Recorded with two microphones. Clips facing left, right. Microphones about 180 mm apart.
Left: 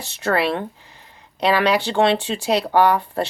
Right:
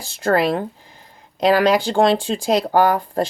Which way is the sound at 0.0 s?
45° right (ahead or behind).